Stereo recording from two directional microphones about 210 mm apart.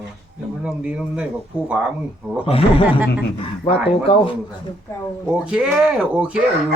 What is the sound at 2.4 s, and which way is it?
Speech, 25° left (ahead or behind).